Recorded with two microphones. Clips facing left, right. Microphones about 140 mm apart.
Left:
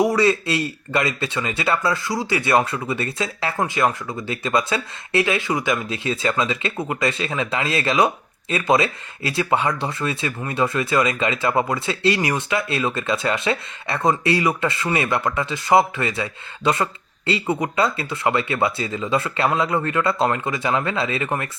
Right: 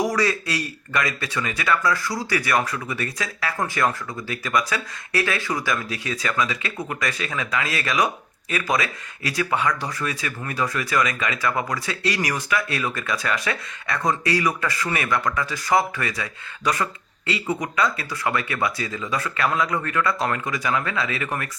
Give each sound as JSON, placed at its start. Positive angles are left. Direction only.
{"t": 0.0, "sound": "speech", "side_deg": 25}